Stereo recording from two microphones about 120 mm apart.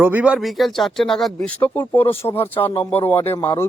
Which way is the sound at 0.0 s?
15° right (ahead or behind).